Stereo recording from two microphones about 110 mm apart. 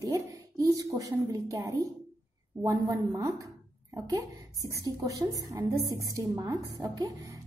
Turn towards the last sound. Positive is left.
turn(degrees=-30)  # may be behind; listen again after turning